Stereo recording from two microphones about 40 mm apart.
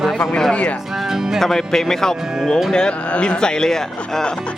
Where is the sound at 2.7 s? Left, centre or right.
Left.